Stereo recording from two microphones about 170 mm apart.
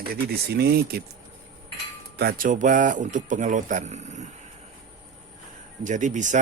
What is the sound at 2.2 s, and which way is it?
Speech, 60° right (ahead or behind).